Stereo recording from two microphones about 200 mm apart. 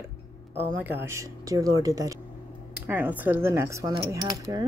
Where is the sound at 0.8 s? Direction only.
10° right (ahead or behind).